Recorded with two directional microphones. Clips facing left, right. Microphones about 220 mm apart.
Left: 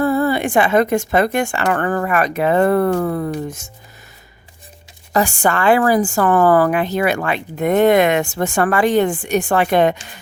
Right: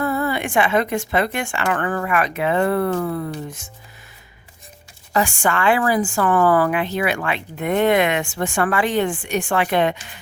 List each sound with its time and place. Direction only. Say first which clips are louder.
0.0 s a woman's voice: left 6 dB; 35° left (ahead or behind)
5.1 s a woman's voice: left 3 dB; 40° left (ahead or behind)